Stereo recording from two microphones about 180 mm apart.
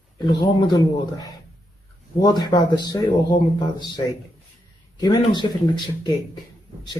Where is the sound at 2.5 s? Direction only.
25° left (ahead or behind).